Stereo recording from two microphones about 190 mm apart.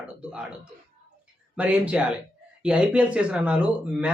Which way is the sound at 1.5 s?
5° right (ahead or behind).